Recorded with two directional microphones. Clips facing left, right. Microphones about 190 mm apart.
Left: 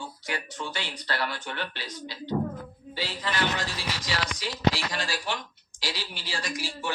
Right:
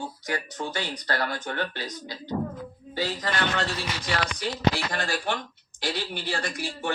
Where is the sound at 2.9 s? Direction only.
45° right (ahead or behind).